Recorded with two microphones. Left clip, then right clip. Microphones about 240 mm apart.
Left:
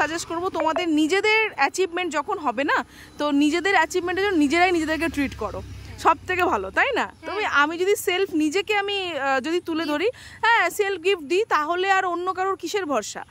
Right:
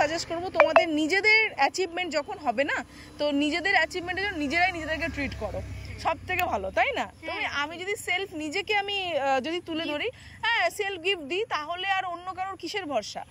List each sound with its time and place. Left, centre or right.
0.0 s speech: centre